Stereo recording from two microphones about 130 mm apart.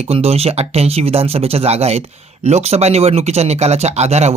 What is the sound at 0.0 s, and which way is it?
Speech, 50° right (ahead or behind).